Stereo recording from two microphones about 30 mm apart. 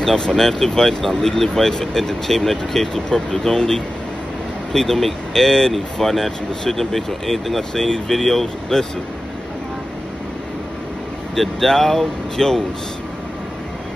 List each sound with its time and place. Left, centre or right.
0.0 s speech: left; by 7.6 s centre
7.7 s speech: centre
11.3 s speech: centre